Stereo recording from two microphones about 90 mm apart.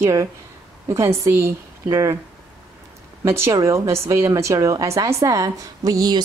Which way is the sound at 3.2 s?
30° right (ahead or behind).